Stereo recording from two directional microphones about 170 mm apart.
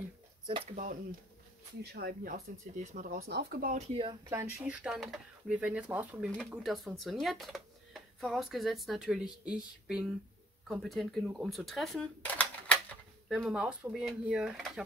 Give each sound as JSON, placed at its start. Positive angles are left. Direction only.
{"t": 0.5, "sound": "speech", "side_deg": -30}
{"t": 1.8, "sound": "speech", "side_deg": -70}
{"t": 2.3, "sound": "speech", "side_deg": -45}
{"t": 3.2, "sound": "speech", "side_deg": -75}
{"t": 3.7, "sound": "speech", "side_deg": -30}
{"t": 4.6, "sound": "speech", "side_deg": -10}
{"t": 13.3, "sound": "speech", "side_deg": -5}